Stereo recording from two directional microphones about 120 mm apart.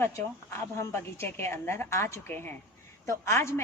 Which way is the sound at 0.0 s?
20° left (ahead or behind).